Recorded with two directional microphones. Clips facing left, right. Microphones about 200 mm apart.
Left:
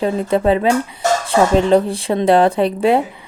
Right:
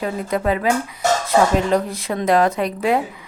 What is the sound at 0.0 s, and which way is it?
Speech, 30° left (ahead or behind).